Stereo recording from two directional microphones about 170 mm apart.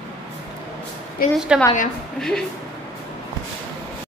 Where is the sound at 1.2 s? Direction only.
60° left (ahead or behind).